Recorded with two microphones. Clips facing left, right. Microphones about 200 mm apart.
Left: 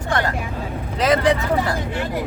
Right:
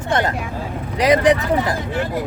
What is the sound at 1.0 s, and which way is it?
Vehicle, 15° right (ahead or behind).